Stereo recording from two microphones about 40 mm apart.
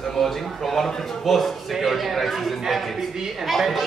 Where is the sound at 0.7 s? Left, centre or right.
Centre.